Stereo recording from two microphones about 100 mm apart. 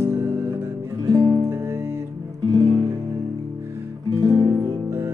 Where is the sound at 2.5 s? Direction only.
45° right (ahead or behind).